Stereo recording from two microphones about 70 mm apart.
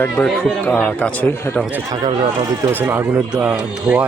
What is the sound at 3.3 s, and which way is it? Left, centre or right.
Speech, centre.